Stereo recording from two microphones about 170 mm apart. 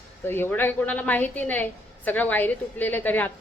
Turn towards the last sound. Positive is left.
turn(degrees=10)  # may be behind; listen again after turning